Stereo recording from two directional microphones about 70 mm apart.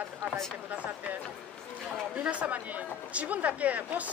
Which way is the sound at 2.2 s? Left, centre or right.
Centre.